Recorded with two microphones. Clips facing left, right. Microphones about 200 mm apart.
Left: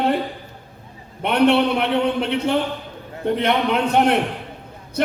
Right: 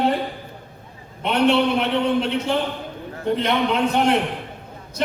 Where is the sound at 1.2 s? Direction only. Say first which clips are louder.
Left 2 dB; 60° left (ahead or behind).